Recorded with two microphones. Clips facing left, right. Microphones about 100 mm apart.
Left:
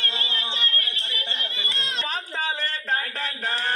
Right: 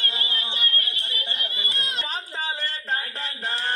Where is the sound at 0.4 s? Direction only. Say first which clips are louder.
Left 1 dB; 25° left (ahead or behind).